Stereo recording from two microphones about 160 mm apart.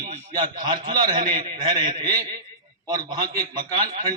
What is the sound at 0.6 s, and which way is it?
A man's voice, 25° right (ahead or behind).